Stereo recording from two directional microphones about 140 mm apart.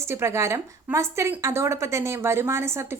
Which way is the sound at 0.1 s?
20° right (ahead or behind).